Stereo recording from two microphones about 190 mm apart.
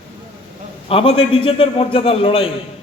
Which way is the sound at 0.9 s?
30° left (ahead or behind).